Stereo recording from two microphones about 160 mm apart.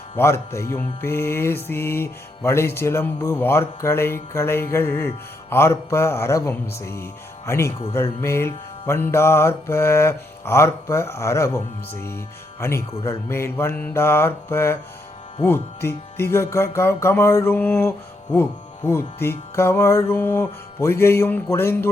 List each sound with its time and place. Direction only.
0.2 s music: 15° left (ahead or behind)